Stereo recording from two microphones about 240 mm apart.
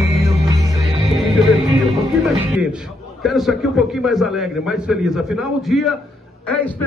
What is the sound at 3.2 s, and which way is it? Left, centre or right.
A man's voice, centre.